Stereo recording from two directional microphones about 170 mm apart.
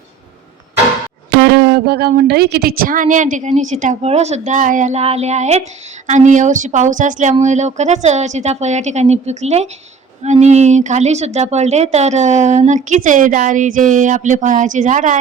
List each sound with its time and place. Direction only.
1.5 s a woman's voice: 85° right; by 15.2 s 45° right (ahead or behind)